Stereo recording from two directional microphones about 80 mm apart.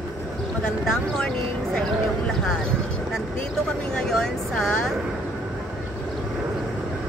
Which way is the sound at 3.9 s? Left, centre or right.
Centre.